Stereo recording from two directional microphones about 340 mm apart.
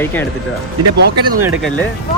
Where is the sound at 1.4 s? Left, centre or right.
Centre.